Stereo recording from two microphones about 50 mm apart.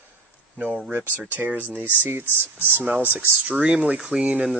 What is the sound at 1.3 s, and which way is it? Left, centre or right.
Speech, right.